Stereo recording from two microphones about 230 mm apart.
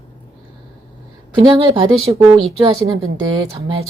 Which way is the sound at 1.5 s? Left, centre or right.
Right.